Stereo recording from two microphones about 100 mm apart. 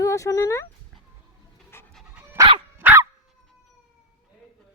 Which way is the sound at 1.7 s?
25° left (ahead or behind).